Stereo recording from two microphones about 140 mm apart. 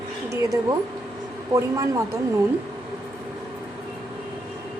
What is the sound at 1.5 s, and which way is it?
Speech, 25° right (ahead or behind).